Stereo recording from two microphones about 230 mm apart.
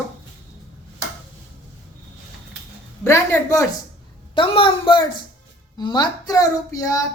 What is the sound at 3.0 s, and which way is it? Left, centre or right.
A woman's voice, centre.